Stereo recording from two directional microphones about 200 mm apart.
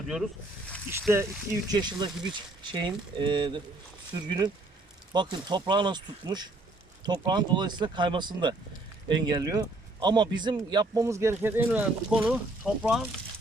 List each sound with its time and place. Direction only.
1.1 s speech: 15° right (ahead or behind)